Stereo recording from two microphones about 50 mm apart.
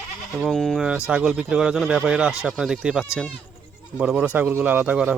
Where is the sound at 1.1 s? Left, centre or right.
Centre.